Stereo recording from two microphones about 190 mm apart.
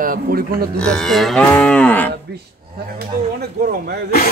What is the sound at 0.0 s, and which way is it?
Cattle, 50° right (ahead or behind).